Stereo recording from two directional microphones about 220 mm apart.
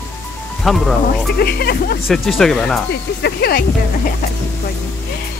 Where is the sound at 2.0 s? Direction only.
Centre (ahead or behind).